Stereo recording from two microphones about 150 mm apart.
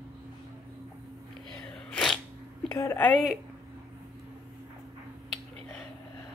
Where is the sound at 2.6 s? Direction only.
15° left (ahead or behind).